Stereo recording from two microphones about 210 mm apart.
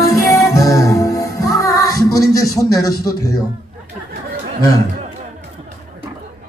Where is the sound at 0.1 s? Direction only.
15° left (ahead or behind).